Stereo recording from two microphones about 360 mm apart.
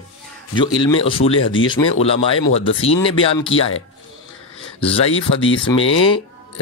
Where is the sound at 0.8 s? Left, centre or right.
Centre.